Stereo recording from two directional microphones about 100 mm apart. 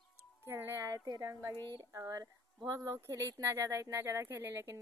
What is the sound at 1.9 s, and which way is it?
A woman's voice, 30° right (ahead or behind).